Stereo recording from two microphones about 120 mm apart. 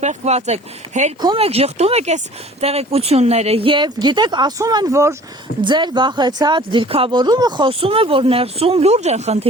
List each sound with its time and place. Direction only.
0.0 s speech: 70° right (ahead or behind)
1.4 s speech: 55° right (ahead or behind); by 5.1 s 25° right (ahead or behind)
5.6 s speech: 40° right (ahead or behind); by 9.5 s 65° right (ahead or behind)